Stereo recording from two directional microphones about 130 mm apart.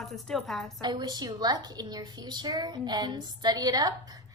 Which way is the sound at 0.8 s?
30° right (ahead or behind).